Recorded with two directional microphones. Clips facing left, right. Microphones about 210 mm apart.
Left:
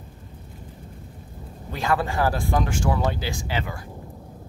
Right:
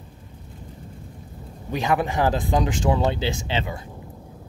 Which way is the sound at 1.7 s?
15° right (ahead or behind).